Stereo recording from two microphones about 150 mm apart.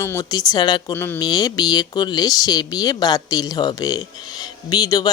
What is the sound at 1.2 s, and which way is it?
Speech, 25° left (ahead or behind).